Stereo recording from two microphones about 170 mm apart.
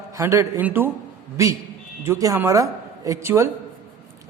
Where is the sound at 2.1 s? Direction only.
20° right (ahead or behind).